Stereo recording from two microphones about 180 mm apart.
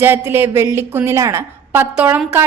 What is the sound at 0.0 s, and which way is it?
A woman's voice, 10° right (ahead or behind).